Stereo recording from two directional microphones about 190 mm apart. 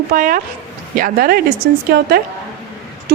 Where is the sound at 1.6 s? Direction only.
65° right (ahead or behind).